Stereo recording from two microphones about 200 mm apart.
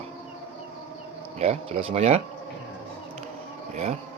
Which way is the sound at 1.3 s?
30° right (ahead or behind).